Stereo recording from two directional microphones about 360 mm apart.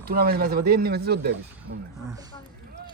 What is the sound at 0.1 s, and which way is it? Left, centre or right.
Speech, right.